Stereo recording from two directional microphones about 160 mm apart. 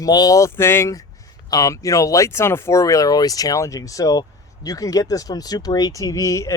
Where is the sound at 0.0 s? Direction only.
25° left (ahead or behind).